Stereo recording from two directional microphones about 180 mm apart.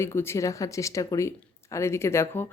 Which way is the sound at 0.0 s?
15° left (ahead or behind).